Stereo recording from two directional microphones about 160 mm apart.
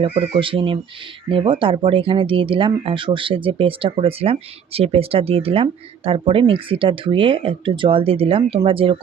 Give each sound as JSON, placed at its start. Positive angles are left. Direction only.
{"t": 0.0, "sound": "speech", "side_deg": -30}